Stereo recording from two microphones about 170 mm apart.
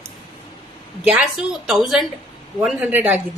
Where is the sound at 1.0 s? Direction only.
5° right (ahead or behind).